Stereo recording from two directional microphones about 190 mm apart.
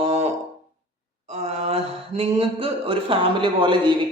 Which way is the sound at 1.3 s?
30° right (ahead or behind).